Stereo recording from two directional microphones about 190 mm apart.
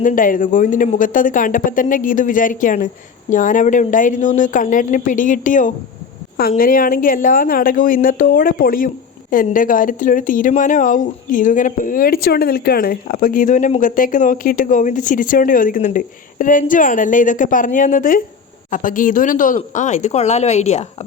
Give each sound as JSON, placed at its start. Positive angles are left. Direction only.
{"t": 0.0, "sound": "speech", "side_deg": 45}